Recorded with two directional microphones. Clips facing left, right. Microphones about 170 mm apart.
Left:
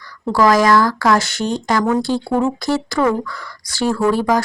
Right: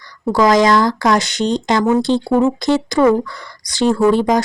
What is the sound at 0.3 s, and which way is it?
Speech, 20° right (ahead or behind).